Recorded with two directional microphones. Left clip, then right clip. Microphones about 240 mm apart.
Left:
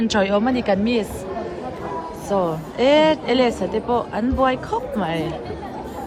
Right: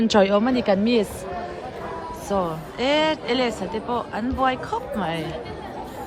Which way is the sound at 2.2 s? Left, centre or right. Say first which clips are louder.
Left 3 dB; centre.